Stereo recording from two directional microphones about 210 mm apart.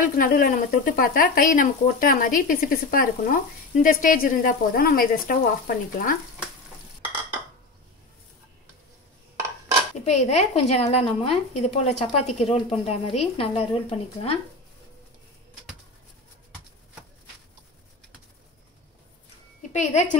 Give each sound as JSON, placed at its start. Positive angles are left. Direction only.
{"t": 0.0, "sound": "speech", "side_deg": 40}
{"t": 10.0, "sound": "a woman's voice", "side_deg": 30}
{"t": 19.7, "sound": "speech", "side_deg": 35}